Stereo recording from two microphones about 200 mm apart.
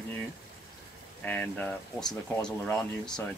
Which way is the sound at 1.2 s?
5° left (ahead or behind).